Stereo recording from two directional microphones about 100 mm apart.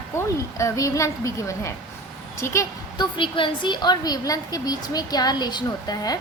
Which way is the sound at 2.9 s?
55° left (ahead or behind).